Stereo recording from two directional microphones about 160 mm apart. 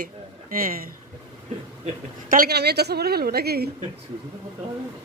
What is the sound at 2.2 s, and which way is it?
A woman's voice, 65° right (ahead or behind).